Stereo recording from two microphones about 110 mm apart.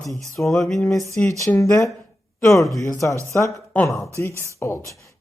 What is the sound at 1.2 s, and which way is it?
Speech, 15° left (ahead or behind).